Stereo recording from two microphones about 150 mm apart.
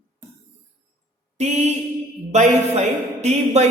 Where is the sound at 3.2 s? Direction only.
45° right (ahead or behind).